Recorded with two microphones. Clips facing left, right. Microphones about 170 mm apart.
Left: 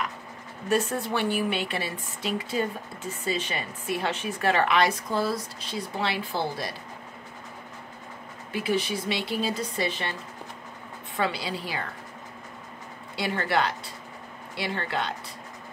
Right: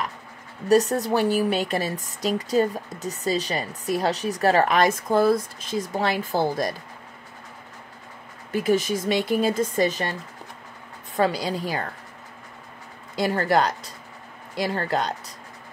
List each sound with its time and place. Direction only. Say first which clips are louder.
0.7 s a woman's voice: right 7 dB; 40° right (ahead or behind)
8.5 s speech: right 5 dB; 45° right (ahead or behind)
11.1 s speech: right 6 dB; 40° right (ahead or behind)
13.1 s a woman's voice: right 5 dB; 40° right (ahead or behind)